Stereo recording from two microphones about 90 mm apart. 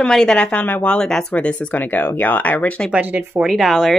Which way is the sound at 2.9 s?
15° right (ahead or behind).